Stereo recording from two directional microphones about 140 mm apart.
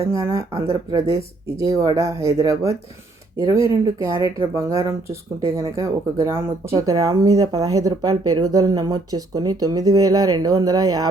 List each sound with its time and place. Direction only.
0.0 s speech: 20° right (ahead or behind)